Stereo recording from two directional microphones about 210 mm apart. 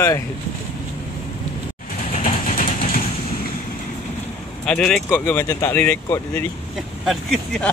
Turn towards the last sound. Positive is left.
turn(degrees=0)  # may be behind; listen again after turning